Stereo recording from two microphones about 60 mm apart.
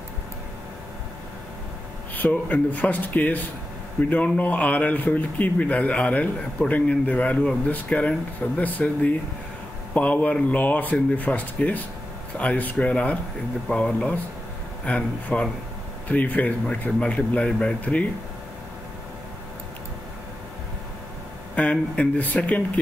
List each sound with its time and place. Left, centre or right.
2.1 s a man's voice: left
9.9 s a man's voice: left
21.5 s a man's voice: left